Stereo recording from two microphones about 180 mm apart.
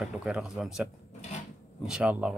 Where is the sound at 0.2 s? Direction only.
Centre (ahead or behind).